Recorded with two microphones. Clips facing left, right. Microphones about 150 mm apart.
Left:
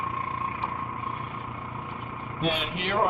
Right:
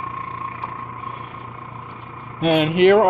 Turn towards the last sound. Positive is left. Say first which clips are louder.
# right 14 dB
turn(degrees=-70)  # may be behind; listen again after turning